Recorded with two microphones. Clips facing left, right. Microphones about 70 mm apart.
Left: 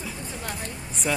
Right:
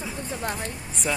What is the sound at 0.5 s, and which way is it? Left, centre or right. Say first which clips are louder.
Speech: right 2 dB; centre.